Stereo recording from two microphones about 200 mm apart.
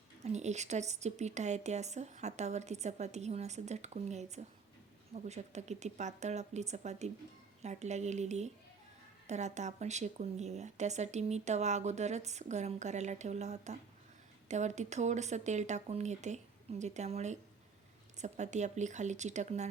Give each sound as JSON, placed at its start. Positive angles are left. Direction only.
{"t": 0.3, "sound": "speech", "side_deg": -35}